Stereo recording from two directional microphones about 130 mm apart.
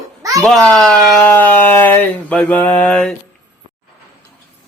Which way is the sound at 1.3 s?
15° left (ahead or behind).